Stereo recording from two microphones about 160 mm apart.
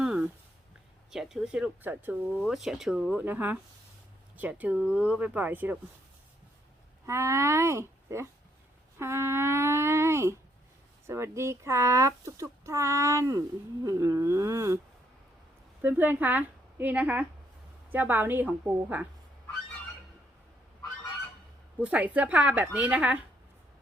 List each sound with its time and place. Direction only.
0.0 s a sound: 5° right (ahead or behind)
1.1 s speech: centre (ahead or behind)
7.0 s speech: 20° right (ahead or behind)
15.8 s a woman's voice: 10° right (ahead or behind)
21.8 s speech: 10° right (ahead or behind)